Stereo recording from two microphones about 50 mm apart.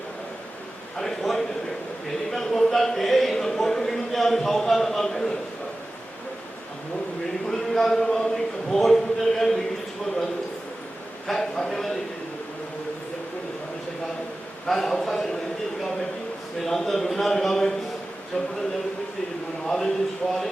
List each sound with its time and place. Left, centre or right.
0.9 s a man's voice: centre
2.3 s a sound: centre
7.5 s a man's voice: centre
11.3 s speech: centre
14.7 s speech: centre
16.6 s speech: centre
18.3 s a sound: left
19.6 s speech: centre